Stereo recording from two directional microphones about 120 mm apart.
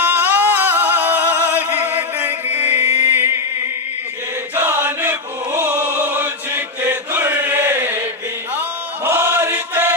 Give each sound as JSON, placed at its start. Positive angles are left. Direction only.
{"t": 0.0, "sound": "music", "side_deg": -15}
{"t": 4.6, "sound": "choir", "side_deg": -15}
{"t": 9.0, "sound": "chant", "side_deg": -20}